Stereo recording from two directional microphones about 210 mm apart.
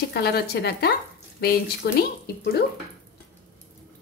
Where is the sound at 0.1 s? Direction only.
50° left (ahead or behind).